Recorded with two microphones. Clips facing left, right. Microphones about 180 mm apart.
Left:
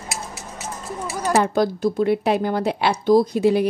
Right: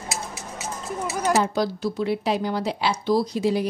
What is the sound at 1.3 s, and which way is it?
Speech, 55° left (ahead or behind).